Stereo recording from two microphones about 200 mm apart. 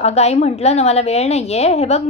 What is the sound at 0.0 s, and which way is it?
A woman's voice, 30° left (ahead or behind).